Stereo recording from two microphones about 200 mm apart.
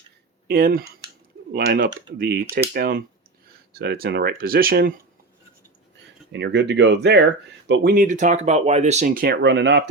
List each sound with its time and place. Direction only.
0.4 s speech: 50° right (ahead or behind)
6.3 s speech: 60° right (ahead or behind)
7.7 s speech: 45° right (ahead or behind)